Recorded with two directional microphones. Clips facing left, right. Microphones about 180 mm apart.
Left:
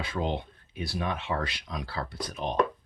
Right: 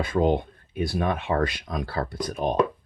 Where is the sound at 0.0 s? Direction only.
50° right (ahead or behind).